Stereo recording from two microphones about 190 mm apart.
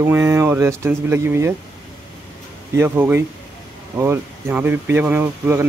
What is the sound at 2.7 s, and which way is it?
A man's voice, 10° right (ahead or behind).